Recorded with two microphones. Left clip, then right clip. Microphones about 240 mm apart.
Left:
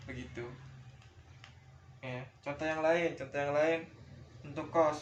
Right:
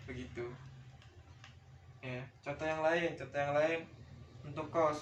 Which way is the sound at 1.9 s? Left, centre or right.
Left.